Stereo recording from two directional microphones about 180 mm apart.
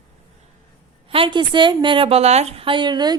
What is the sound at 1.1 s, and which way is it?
A woman's voice, 30° right (ahead or behind).